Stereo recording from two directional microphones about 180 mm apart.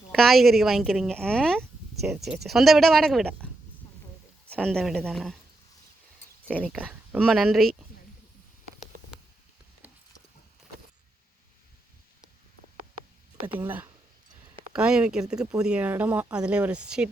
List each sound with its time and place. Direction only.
0.1 s speech: centre (ahead or behind)
6.5 s speech: 5° right (ahead or behind)
9.8 s a sound: 10° right (ahead or behind)
13.7 s speech: 10° right (ahead or behind)